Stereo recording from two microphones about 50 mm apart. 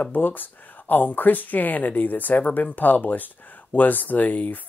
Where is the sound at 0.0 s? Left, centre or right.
Left.